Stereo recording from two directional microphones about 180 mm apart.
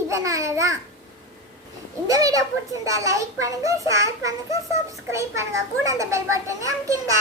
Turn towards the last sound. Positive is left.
turn(degrees=-15)  # may be behind; listen again after turning